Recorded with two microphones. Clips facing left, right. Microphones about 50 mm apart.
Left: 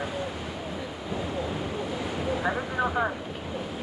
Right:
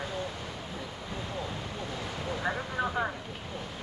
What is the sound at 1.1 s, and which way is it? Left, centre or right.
Waves, centre.